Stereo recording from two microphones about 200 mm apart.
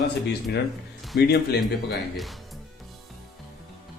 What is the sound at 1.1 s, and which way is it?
Speech, 55° left (ahead or behind).